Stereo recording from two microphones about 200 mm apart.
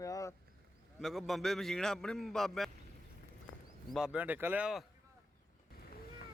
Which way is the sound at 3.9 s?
5° right (ahead or behind).